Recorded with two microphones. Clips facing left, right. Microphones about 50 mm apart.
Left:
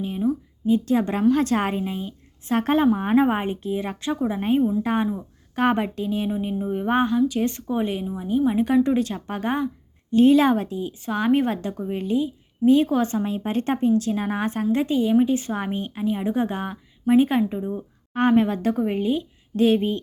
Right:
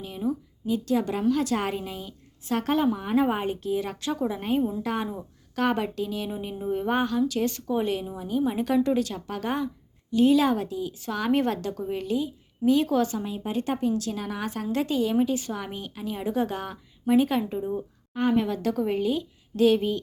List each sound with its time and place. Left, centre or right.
0.7 s a woman's voice: left
6.3 s speech: centre
6.9 s speech: left
10.1 s a woman's voice: left
13.1 s a woman's voice: left
13.8 s a woman's voice: left
16.0 s speech: left
18.1 s speech: left
18.3 s speech: left